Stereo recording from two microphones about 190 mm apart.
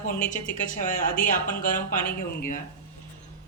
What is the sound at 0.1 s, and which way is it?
A woman's voice, 40° left (ahead or behind).